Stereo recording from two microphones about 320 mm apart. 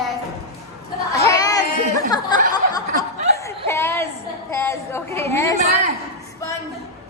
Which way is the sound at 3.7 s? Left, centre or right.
Centre.